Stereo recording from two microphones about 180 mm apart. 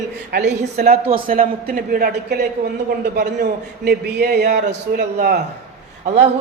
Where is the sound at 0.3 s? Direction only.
60° right (ahead or behind).